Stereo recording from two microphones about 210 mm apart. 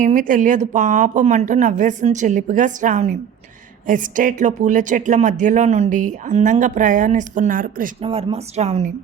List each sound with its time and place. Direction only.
0.0 s speech: 40° right (ahead or behind)
8.0 s speech: 25° right (ahead or behind)